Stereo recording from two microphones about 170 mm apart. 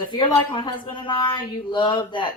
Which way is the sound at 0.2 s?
30° left (ahead or behind).